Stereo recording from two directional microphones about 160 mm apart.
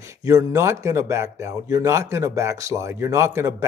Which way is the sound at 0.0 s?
20° right (ahead or behind).